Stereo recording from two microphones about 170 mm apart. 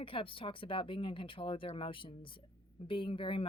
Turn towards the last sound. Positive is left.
turn(degrees=30)  # may be behind; listen again after turning